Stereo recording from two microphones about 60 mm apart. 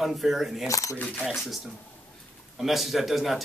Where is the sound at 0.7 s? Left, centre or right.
Left.